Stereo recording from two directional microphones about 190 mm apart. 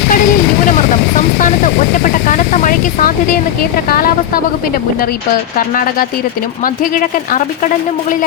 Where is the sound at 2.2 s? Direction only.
40° left (ahead or behind).